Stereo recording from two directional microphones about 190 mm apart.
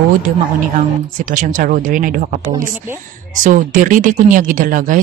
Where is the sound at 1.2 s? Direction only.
45° right (ahead or behind).